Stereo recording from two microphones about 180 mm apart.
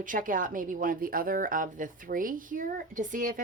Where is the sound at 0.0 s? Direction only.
50° right (ahead or behind).